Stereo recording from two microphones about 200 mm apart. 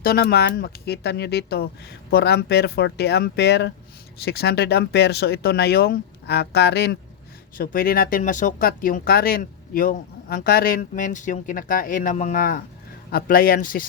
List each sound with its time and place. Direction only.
0.0 s speech: 50° left (ahead or behind)